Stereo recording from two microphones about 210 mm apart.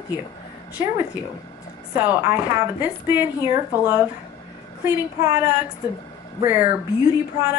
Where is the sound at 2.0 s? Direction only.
10° right (ahead or behind).